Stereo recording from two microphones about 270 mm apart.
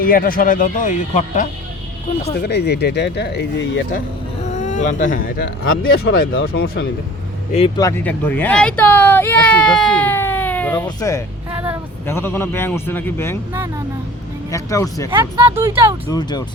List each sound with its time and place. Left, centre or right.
0.0 s speech: left
2.4 s speech: left
4.4 s speech: left
7.5 s speech: centre
11.5 s speech: centre
12.0 s speech: centre
13.5 s speech: centre
14.5 s speech: centre
15.1 s speech: centre